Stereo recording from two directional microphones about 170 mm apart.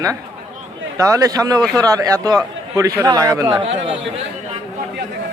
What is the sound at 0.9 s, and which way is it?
A man's voice, 20° right (ahead or behind).